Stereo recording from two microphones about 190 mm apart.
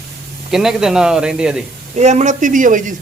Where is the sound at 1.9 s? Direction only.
35° right (ahead or behind).